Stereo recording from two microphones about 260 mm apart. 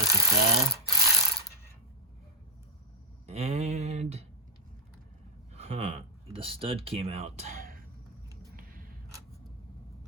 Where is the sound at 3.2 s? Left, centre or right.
Right.